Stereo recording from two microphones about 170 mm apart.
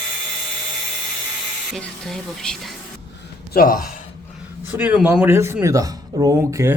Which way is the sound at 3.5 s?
55° left (ahead or behind).